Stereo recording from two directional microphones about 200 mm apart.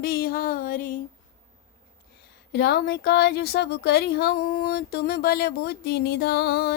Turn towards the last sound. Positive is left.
turn(degrees=50)  # may be behind; listen again after turning